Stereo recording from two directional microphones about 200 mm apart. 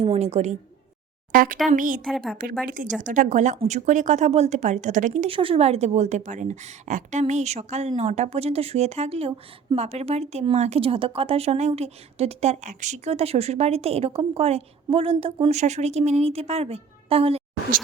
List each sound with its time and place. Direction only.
0.0 s a woman's voice: 30° right (ahead or behind)
2.0 s speech: centre (ahead or behind)
2.6 s speech: 45° right (ahead or behind)